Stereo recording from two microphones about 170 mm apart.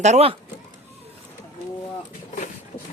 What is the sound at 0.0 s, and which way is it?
Speech, 40° right (ahead or behind).